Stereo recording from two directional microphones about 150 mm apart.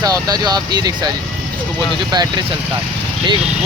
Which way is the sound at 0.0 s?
25° right (ahead or behind).